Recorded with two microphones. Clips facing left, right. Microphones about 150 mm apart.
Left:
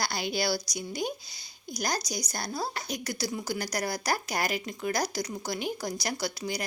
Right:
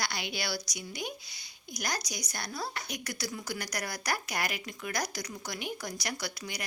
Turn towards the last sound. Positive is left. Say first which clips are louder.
# left 6 dB
turn(degrees=30)  # may be behind; listen again after turning